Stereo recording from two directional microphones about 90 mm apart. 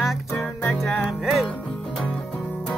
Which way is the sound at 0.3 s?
30° left (ahead or behind).